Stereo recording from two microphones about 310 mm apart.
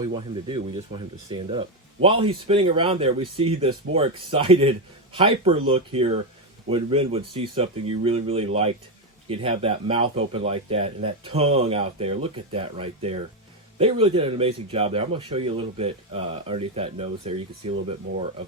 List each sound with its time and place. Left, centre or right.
0.0 s speech: centre